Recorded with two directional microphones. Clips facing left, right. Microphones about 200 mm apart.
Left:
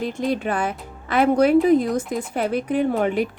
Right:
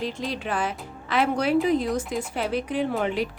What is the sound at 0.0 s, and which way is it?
A woman's voice, 50° left (ahead or behind).